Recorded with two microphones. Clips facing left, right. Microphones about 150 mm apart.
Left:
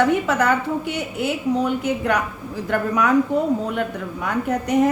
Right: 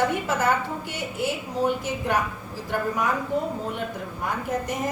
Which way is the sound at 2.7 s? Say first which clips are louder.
Left 5 dB; 75° left (ahead or behind).